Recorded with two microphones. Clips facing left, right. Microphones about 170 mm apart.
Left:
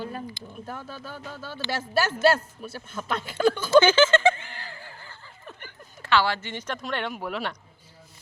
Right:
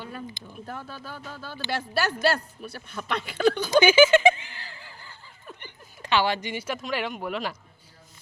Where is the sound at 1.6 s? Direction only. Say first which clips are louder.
Right 1 dB; 20° right (ahead or behind).